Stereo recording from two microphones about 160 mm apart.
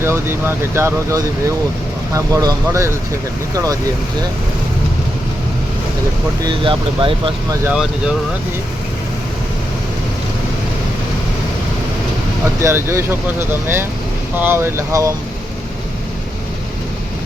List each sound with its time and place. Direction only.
0.0 s speech: 15° right (ahead or behind)
6.4 s speech: 30° right (ahead or behind)
7.6 s speech: 5° right (ahead or behind)
12.6 s speech: 15° right (ahead or behind)
14.3 s speech: 15° right (ahead or behind)